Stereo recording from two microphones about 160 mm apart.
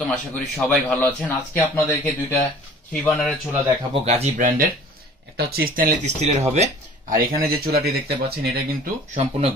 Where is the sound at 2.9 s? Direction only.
Centre (ahead or behind).